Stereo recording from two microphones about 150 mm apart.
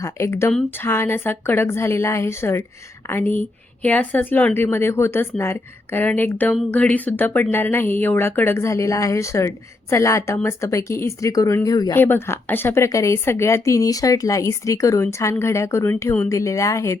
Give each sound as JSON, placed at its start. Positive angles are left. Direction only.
{"t": 0.0, "sound": "a woman's voice", "side_deg": 20}
{"t": 11.9, "sound": "a woman's voice", "side_deg": 15}